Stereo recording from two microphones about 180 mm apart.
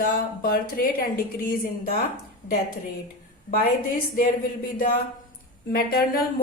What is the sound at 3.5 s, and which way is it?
Speech, 60° left (ahead or behind).